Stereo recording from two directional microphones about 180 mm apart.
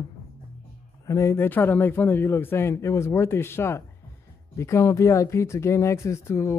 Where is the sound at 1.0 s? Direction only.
15° left (ahead or behind).